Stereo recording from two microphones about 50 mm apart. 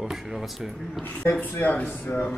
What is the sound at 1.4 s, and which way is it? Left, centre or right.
Speech, left.